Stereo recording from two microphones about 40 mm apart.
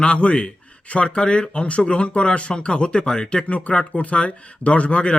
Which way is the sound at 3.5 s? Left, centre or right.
Left.